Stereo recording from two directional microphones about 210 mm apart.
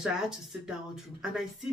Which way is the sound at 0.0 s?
5° right (ahead or behind).